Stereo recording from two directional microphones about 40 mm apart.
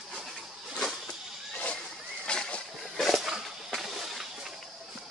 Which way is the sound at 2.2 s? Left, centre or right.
Left.